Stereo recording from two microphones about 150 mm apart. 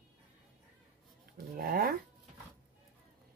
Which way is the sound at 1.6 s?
80° right.